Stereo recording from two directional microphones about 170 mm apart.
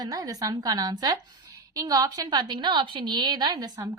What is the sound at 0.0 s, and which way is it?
A woman's voice, 20° right (ahead or behind).